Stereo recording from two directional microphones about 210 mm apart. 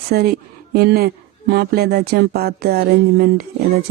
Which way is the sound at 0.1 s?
45° right (ahead or behind).